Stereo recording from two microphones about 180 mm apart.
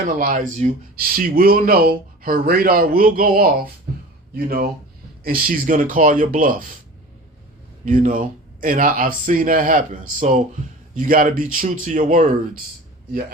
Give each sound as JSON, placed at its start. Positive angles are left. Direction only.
{"t": 0.2, "sound": "a man's voice", "side_deg": -50}
{"t": 7.9, "sound": "a man's voice", "side_deg": -50}